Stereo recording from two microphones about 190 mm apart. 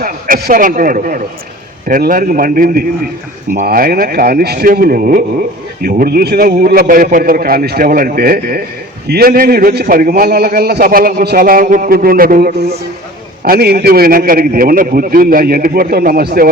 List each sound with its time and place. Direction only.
0.0 s a man's voice: 50° right (ahead or behind)